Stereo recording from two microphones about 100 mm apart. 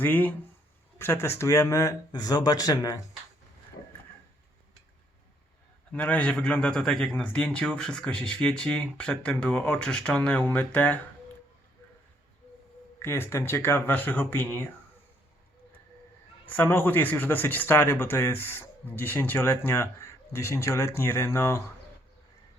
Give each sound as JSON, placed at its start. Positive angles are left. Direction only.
{"t": 0.0, "sound": "speech", "side_deg": 20}
{"t": 5.9, "sound": "a man's voice", "side_deg": 15}
{"t": 13.0, "sound": "speech", "side_deg": 25}
{"t": 16.5, "sound": "speech", "side_deg": 20}